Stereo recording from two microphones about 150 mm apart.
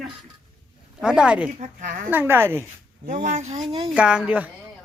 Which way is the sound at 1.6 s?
55° right (ahead or behind).